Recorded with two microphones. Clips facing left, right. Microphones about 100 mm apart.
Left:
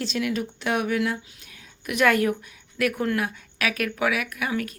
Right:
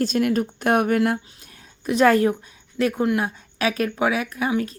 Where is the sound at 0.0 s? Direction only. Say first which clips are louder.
Right 6 dB; 50° right (ahead or behind).